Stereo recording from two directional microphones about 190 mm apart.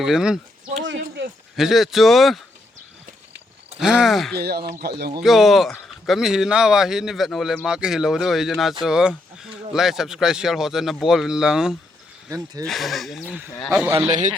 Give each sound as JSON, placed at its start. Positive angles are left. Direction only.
{"t": 0.0, "sound": "speech", "side_deg": -5}
{"t": 0.9, "sound": "a sound", "side_deg": -65}
{"t": 1.5, "sound": "speech", "side_deg": 0}
{"t": 3.8, "sound": "speech", "side_deg": -5}
{"t": 4.4, "sound": "a man's voice", "side_deg": -55}
{"t": 5.2, "sound": "speech", "side_deg": 0}